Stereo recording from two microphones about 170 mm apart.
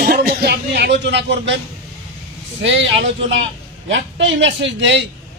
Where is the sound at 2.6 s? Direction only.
90° right.